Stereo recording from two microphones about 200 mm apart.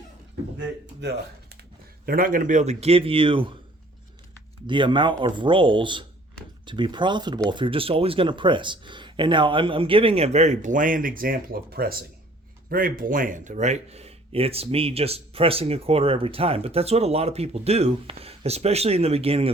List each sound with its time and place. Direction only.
2.0 s speech: 45° right (ahead or behind); by 3.5 s 25° right (ahead or behind)
4.6 s speech: 25° right (ahead or behind)